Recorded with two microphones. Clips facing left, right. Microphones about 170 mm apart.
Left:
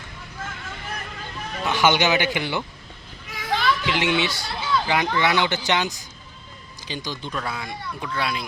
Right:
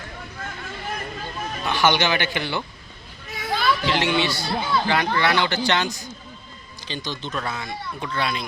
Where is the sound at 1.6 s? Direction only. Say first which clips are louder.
Left 1 dB; 15° left (ahead or behind).